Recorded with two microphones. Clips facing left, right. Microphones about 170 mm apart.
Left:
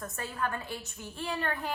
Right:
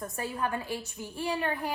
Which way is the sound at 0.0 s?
15° right (ahead or behind).